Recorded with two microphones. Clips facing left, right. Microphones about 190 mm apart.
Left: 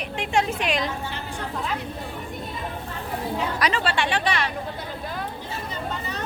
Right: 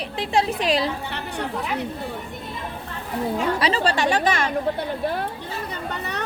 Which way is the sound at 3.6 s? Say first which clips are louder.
Right 3 dB; 35° right (ahead or behind).